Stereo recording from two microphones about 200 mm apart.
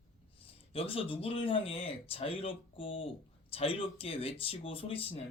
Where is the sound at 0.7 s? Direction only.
30° left (ahead or behind).